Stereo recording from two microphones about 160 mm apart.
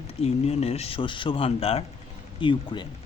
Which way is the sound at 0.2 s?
40° left (ahead or behind).